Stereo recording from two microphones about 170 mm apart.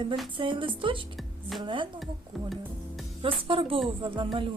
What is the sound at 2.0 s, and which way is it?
Music, centre (ahead or behind).